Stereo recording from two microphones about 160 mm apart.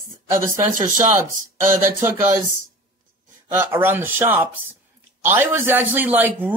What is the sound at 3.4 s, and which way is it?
A man's voice, 15° right (ahead or behind).